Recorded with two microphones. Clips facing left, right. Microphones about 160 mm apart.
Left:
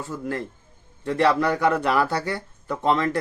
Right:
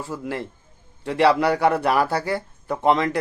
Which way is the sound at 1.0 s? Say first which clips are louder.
Right 2 dB; 15° right (ahead or behind).